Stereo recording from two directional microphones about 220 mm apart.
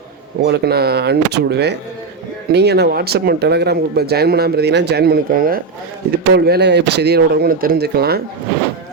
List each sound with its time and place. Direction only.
0.4 s speech: 50° right (ahead or behind)